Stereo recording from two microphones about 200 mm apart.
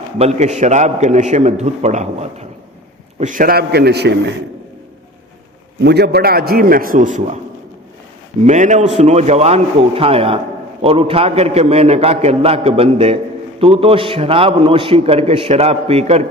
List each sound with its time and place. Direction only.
0.2 s a man's voice: 35° right (ahead or behind); by 4.1 s 55° right (ahead or behind)
5.8 s a man's voice: 55° right (ahead or behind); by 7.3 s 40° right (ahead or behind)
8.4 s a man's voice: 35° right (ahead or behind)